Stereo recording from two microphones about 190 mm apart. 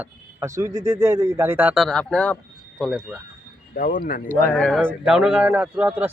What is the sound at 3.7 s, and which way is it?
Speech, 45° left (ahead or behind).